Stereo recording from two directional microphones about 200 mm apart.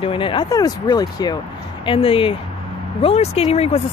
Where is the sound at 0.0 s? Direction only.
25° left (ahead or behind).